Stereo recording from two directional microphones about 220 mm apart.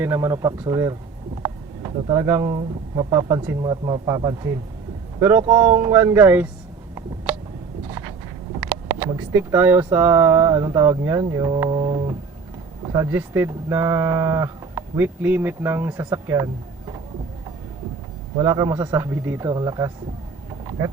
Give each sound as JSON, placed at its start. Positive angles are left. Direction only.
{"t": 0.0, "sound": "speech", "side_deg": -10}
{"t": 7.3, "sound": "a sound", "side_deg": -5}
{"t": 7.9, "sound": "a sound", "side_deg": -15}
{"t": 9.0, "sound": "speech", "side_deg": -10}
{"t": 18.3, "sound": "speech", "side_deg": -15}
{"t": 20.7, "sound": "vehicle", "side_deg": -15}